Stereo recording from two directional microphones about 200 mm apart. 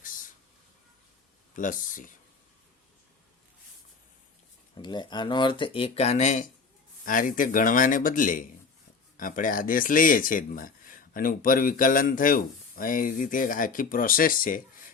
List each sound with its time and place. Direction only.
1.5 s speech: 40° left (ahead or behind)
4.8 s speech: 20° left (ahead or behind); by 14.6 s 45° left (ahead or behind)